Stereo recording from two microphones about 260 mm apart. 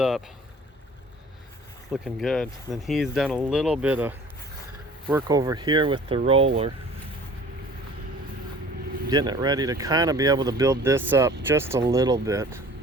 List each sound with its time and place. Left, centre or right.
1.9 s speech: centre; by 6.5 s right
9.0 s speech: centre